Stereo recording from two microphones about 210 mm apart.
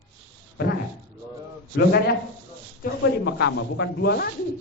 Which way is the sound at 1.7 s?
50° left (ahead or behind).